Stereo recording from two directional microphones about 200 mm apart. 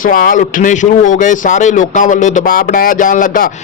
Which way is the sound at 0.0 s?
45° left (ahead or behind).